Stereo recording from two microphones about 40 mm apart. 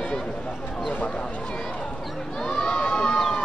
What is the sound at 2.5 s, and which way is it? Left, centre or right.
Crowd, centre.